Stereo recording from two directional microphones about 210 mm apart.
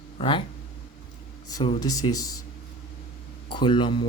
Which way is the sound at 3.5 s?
20° left (ahead or behind).